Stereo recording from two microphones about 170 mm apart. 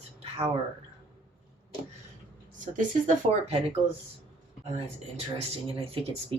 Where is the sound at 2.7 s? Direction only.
40° right (ahead or behind).